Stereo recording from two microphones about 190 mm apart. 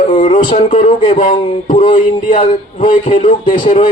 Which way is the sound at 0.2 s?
40° left (ahead or behind).